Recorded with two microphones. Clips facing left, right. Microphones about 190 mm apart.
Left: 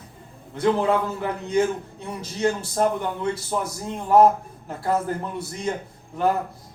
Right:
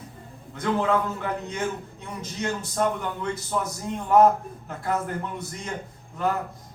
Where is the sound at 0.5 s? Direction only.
30° left (ahead or behind).